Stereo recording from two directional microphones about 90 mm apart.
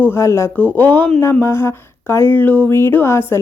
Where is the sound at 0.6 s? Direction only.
20° left (ahead or behind).